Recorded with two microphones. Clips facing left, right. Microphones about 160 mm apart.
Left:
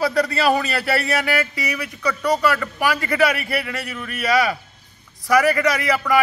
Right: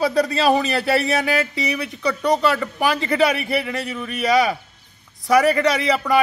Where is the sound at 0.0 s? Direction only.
20° right (ahead or behind).